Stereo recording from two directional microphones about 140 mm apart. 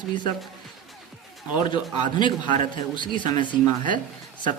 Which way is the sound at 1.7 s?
35° left (ahead or behind).